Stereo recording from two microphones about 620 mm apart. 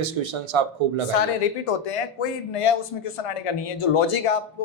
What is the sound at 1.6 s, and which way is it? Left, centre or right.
Speech, left.